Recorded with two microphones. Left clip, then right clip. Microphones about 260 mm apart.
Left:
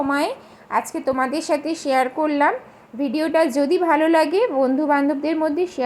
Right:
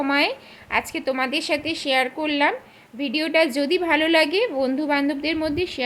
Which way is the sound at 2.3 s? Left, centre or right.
Centre.